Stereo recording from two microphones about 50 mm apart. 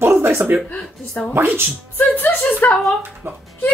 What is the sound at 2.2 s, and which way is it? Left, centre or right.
Speech, left.